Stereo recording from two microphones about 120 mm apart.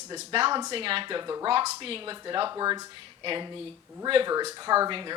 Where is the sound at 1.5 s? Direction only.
50° right (ahead or behind).